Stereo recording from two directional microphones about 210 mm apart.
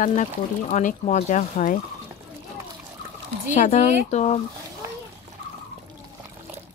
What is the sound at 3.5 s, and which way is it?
Speech, 35° left (ahead or behind).